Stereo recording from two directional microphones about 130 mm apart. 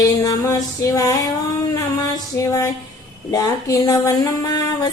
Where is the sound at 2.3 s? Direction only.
20° left (ahead or behind).